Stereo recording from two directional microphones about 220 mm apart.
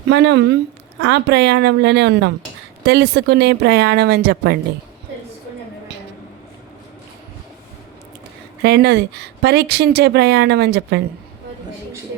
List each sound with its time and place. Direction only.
0.1 s speech: 55° right (ahead or behind)
8.6 s speech: 50° right (ahead or behind)